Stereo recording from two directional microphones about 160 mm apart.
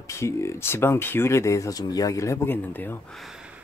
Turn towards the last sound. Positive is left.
turn(degrees=-5)  # may be behind; listen again after turning